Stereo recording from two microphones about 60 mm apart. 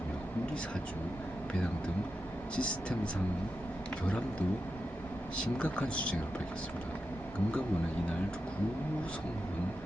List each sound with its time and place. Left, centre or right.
2.6 s speech: centre
5.5 s speech: centre